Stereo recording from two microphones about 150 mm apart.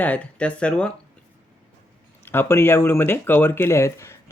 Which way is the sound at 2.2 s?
15° left (ahead or behind).